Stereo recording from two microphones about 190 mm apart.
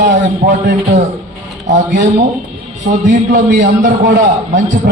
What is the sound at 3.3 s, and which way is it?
Speech, 45° right (ahead or behind).